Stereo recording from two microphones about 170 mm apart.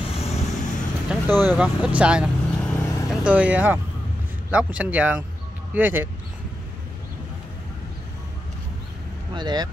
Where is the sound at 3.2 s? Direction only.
10° right (ahead or behind).